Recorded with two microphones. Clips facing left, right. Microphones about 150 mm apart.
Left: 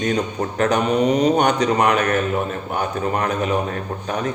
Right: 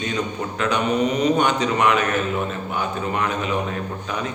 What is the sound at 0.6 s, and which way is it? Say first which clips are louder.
A man's voice: left 3 dB; 40° left (ahead or behind).